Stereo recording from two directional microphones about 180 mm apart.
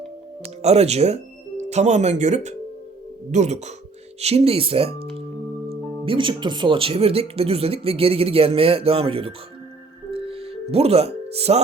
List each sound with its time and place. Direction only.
0.4 s speech: 35° right (ahead or behind)
10.1 s music: 30° right (ahead or behind)